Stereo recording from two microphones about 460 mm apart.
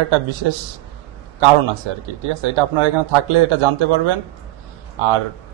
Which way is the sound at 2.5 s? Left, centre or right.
Right.